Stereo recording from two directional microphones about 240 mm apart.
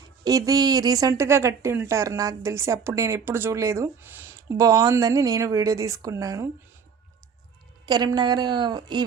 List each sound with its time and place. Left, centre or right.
0.3 s a woman's voice: centre
7.9 s a woman's voice: centre